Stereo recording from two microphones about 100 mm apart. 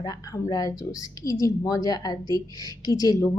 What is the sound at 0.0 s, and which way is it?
A woman's voice, 40° left (ahead or behind).